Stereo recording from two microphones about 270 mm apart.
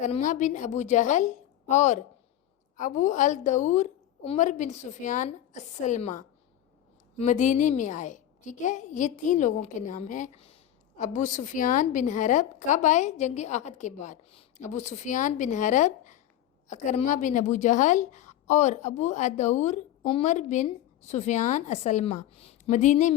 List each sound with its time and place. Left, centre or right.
0.0 s a woman's voice: left